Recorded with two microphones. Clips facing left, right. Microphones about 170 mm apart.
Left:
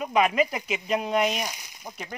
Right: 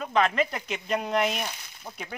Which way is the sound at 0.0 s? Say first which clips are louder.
Left 2 dB; 10° left (ahead or behind).